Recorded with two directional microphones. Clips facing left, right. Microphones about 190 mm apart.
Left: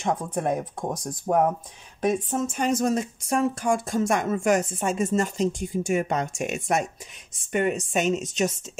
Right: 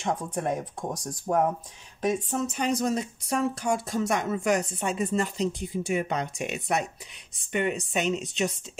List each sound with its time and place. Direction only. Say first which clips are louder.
0.0 s speech: left 3 dB; 50° left (ahead or behind)